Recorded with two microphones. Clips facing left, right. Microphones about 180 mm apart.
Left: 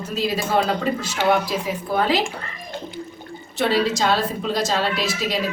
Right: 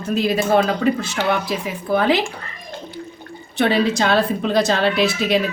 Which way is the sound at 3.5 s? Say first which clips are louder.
Right 3 dB; 60° right (ahead or behind).